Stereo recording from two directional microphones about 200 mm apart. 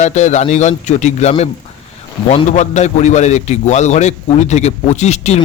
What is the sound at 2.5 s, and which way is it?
A man's voice, 35° left (ahead or behind).